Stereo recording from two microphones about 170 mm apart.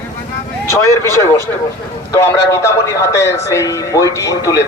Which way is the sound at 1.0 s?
15° left (ahead or behind).